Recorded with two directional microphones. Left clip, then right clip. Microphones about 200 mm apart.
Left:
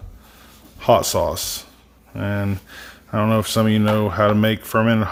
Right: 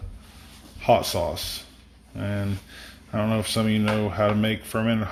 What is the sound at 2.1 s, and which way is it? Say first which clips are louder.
Speech: left 6 dB; 35° left (ahead or behind).